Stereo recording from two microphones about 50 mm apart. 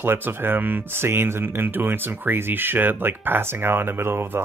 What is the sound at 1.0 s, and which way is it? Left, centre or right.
Speech, right.